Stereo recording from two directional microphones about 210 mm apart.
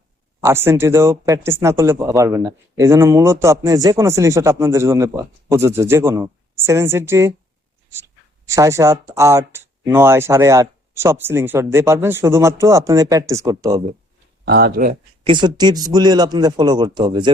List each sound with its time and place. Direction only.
0.4 s a man's voice: 10° right (ahead or behind)
8.4 s a man's voice: 15° right (ahead or behind)
14.4 s speech: 50° right (ahead or behind)
15.2 s a man's voice: 20° right (ahead or behind)